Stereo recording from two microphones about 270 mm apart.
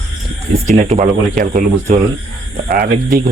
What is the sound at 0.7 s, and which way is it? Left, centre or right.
Speech, right.